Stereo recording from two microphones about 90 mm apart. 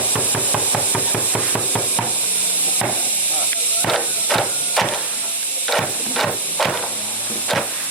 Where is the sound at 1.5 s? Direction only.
15° left (ahead or behind).